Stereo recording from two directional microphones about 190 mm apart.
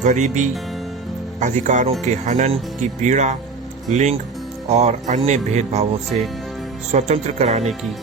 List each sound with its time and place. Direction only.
0.0 s speech: 40° right (ahead or behind)